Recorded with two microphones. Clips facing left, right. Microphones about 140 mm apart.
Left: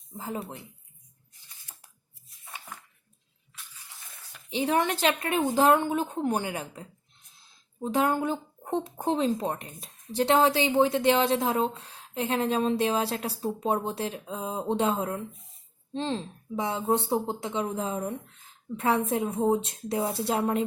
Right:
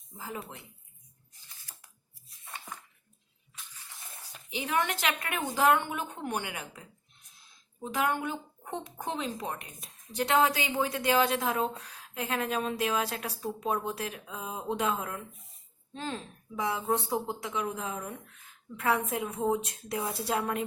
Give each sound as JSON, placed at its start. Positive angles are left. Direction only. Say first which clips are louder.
{"t": 0.2, "sound": "speech", "louder": "left 5 dB", "side_deg": 30}
{"t": 4.4, "sound": "a woman's voice", "louder": "left 5 dB", "side_deg": 30}